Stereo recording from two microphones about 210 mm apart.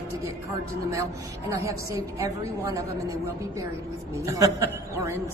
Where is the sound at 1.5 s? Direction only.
15° right (ahead or behind).